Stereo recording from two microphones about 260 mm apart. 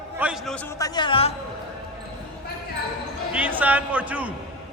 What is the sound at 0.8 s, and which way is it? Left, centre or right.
Speech, centre.